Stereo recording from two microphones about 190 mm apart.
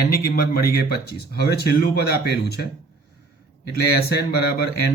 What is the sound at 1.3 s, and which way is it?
Speech, 60° left (ahead or behind).